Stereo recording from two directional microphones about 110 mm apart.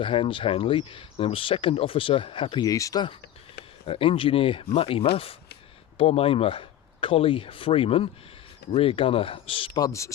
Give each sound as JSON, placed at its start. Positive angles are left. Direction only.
{"t": 0.0, "sound": "speech", "side_deg": 50}
{"t": 2.6, "sound": "speech", "side_deg": 30}
{"t": 3.8, "sound": "speech", "side_deg": 55}
{"t": 9.7, "sound": "speech", "side_deg": 30}